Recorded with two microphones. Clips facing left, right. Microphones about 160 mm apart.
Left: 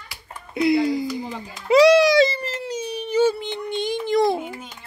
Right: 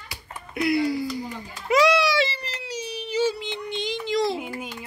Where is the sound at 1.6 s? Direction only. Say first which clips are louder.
Left 6 dB; 35° left (ahead or behind); by 4.4 s 55° left (ahead or behind).